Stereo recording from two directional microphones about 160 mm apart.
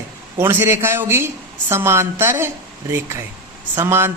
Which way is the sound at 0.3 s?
15° right (ahead or behind).